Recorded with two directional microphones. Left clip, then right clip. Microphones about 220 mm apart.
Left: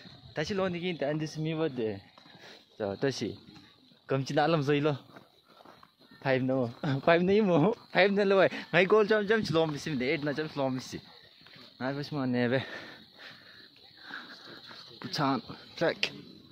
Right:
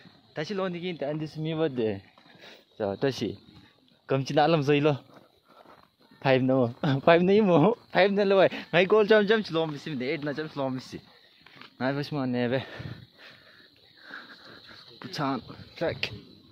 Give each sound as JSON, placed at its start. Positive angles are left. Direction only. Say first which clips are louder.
{"t": 0.3, "sound": "speech", "louder": "even", "side_deg": -10}
{"t": 1.6, "sound": "speech", "louder": "right 5 dB", "side_deg": -45}
{"t": 2.4, "sound": "a sound", "louder": "right 4 dB", "side_deg": -20}
{"t": 4.1, "sound": "speech", "louder": "right 4 dB", "side_deg": -20}
{"t": 6.2, "sound": "speech", "louder": "right 5 dB", "side_deg": -30}
{"t": 9.4, "sound": "speech", "louder": "left 1 dB", "side_deg": 0}
{"t": 11.8, "sound": "speech", "louder": "right 5 dB", "side_deg": -45}
{"t": 12.2, "sound": "a sound", "louder": "left 2 dB", "side_deg": -10}
{"t": 14.1, "sound": "sniff", "louder": "even", "side_deg": -5}
{"t": 15.0, "sound": "speech", "louder": "left 1 dB", "side_deg": 0}